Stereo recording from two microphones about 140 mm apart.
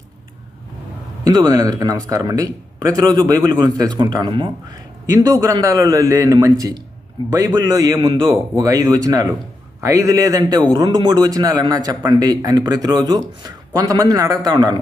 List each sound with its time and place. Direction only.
1.2 s speech: 30° right (ahead or behind)